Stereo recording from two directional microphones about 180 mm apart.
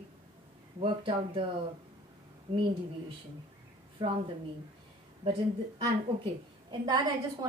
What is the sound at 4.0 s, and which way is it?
Speech, 30° right (ahead or behind).